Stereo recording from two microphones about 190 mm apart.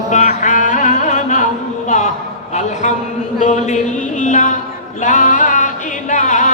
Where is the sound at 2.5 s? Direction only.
40° left (ahead or behind).